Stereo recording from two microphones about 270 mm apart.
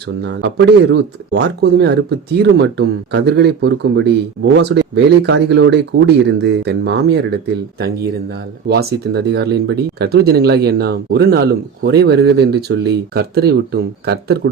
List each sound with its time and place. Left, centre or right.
0.2 s speech: right